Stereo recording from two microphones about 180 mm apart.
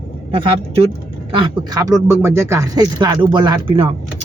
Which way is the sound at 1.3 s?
30° right (ahead or behind).